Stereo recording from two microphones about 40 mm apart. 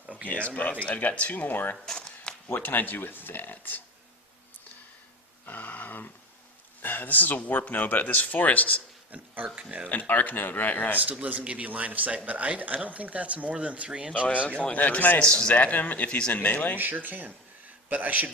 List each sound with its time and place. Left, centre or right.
0.3 s speech: left
1.9 s a sound: left
2.5 s speech: left
5.5 s a sound: left
6.8 s speech: left
9.6 s speech: right
9.9 s speech: left
11.2 s speech: right
14.3 s speech: left
15.2 s speech: left
16.0 s speech: left
16.3 s speech: left
16.7 s a man's voice: right